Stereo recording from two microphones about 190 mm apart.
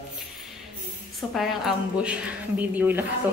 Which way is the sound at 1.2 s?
Centre (ahead or behind).